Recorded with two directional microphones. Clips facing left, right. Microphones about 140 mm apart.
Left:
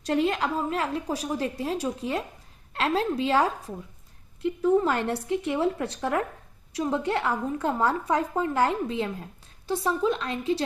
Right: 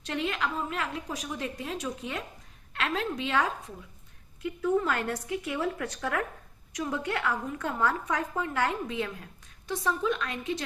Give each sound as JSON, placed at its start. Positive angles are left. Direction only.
{"t": 0.0, "sound": "a woman's voice", "side_deg": 35}